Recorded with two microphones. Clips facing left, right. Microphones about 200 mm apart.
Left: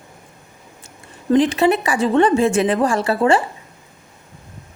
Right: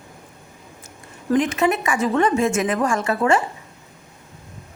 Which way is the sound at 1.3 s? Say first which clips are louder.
Left 4 dB; 30° left (ahead or behind).